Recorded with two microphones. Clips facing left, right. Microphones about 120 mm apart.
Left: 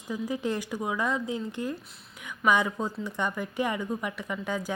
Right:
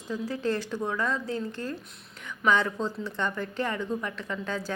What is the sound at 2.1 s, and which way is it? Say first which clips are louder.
Speech: even; 15° left (ahead or behind).